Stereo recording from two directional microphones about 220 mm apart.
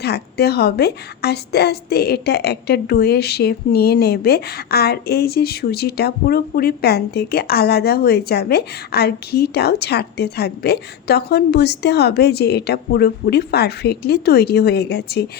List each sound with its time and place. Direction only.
0.0 s a woman's voice: 45° left (ahead or behind)